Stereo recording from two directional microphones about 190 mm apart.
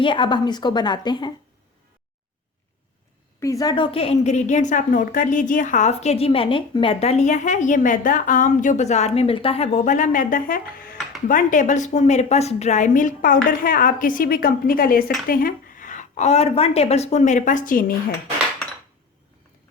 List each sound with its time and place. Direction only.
0.0 s a woman's voice: 25° left (ahead or behind)
3.4 s a woman's voice: 20° left (ahead or behind); by 17.9 s 45° left (ahead or behind)